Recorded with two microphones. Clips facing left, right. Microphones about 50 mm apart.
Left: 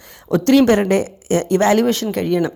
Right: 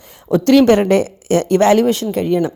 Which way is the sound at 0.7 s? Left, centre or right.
Right.